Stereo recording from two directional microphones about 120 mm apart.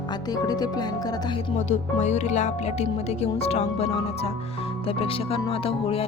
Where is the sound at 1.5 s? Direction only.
80° left; by 6.0 s 55° left (ahead or behind).